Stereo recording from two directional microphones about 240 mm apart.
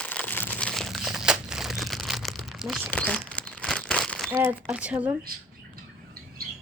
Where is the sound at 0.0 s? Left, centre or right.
Centre.